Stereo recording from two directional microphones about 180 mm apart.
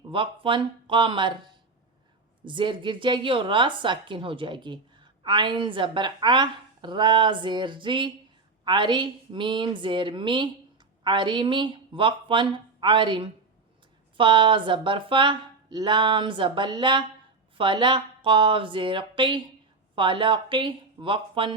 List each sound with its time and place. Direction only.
0.1 s speech: 30° right (ahead or behind)
2.4 s speech: 25° right (ahead or behind)